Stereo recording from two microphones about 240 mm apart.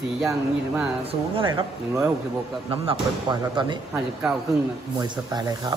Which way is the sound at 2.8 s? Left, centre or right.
Centre.